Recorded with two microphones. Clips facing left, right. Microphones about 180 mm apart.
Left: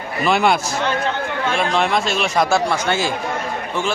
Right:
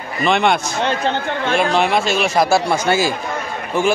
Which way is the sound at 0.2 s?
5° left (ahead or behind).